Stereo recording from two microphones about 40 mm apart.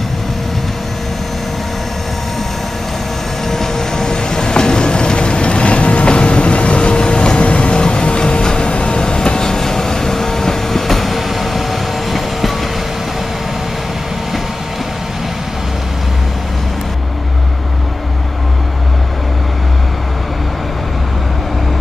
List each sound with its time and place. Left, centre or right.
3.4 s train: centre